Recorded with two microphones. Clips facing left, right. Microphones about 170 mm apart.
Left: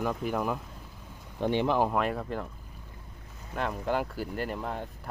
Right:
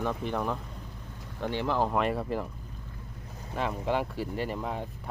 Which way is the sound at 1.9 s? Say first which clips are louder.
Right 1 dB; centre (ahead or behind).